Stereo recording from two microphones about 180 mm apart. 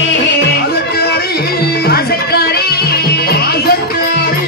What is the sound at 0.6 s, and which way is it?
Music, 65° left (ahead or behind).